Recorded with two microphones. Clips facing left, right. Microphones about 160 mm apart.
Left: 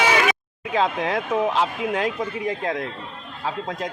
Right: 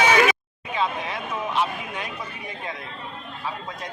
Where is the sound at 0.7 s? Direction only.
90° left.